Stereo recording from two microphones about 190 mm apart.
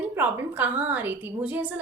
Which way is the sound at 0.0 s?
10° right (ahead or behind).